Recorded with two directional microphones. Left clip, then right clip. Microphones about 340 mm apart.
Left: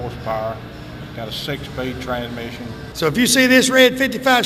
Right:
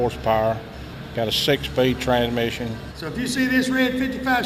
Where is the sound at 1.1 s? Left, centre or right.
Right.